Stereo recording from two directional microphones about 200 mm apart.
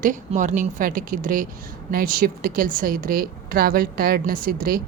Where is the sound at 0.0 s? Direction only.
40° right (ahead or behind).